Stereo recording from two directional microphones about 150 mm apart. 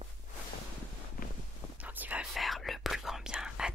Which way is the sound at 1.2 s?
70° left (ahead or behind).